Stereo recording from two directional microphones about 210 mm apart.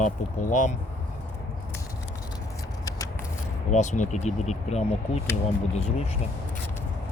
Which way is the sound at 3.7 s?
35° left (ahead or behind).